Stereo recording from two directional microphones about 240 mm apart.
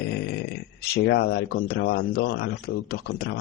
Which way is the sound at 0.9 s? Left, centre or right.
Left.